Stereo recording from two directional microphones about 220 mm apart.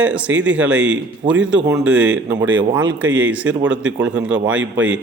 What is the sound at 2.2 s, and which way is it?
Speech, 55° right (ahead or behind).